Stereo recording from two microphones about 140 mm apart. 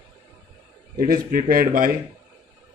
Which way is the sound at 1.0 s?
90° right.